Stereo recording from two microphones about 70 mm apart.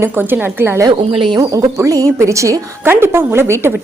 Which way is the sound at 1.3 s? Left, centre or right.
Right.